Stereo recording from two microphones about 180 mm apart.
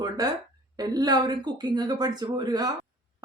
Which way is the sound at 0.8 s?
20° right (ahead or behind).